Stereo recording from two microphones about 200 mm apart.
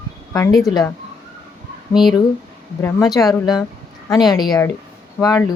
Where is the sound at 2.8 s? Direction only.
15° left (ahead or behind).